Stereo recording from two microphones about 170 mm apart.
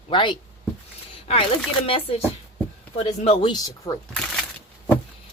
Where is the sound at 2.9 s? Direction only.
35° left (ahead or behind); by 4.0 s 20° left (ahead or behind).